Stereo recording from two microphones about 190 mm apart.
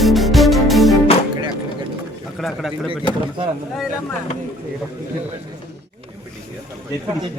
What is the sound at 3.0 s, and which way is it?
Speech, 25° right (ahead or behind).